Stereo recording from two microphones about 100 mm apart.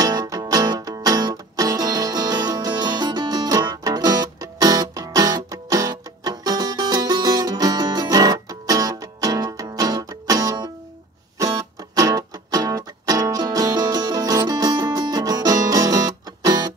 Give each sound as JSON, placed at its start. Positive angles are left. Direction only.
{"t": 0.0, "sound": "music", "side_deg": -40}